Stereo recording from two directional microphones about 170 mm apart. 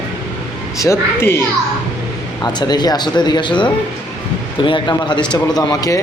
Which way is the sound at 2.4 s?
25° left (ahead or behind).